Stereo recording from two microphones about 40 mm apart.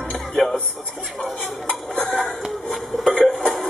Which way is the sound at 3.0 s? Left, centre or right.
Centre.